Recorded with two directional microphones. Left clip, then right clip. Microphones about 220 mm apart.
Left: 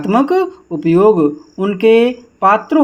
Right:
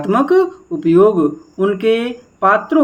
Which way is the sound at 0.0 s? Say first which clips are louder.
Even; 25° left (ahead or behind).